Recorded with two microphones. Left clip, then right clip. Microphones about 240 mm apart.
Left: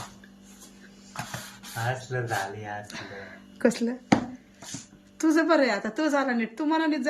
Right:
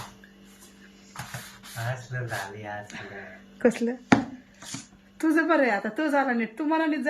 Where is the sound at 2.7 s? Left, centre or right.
Centre.